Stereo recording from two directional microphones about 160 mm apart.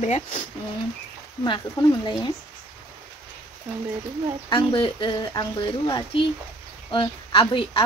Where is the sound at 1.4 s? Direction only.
25° left (ahead or behind).